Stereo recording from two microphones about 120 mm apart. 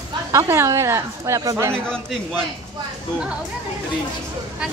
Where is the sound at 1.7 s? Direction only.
5° left (ahead or behind).